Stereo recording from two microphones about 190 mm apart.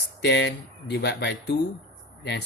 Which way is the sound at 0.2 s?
65° left (ahead or behind).